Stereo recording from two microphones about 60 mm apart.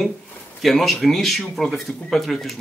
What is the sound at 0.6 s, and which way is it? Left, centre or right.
Speech, centre.